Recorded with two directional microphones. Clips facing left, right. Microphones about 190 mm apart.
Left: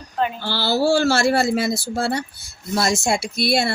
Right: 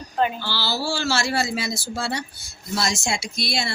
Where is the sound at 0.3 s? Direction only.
50° left (ahead or behind).